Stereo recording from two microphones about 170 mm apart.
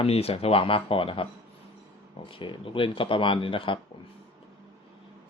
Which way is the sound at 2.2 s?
30° left (ahead or behind).